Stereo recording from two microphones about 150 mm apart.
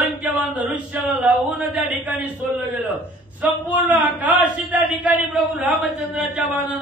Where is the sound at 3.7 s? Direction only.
10° right (ahead or behind).